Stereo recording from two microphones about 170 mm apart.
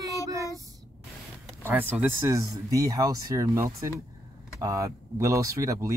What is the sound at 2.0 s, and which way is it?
Speech, 15° right (ahead or behind).